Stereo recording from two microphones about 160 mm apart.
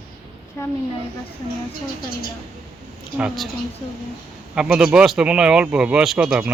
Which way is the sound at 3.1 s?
5° right (ahead or behind).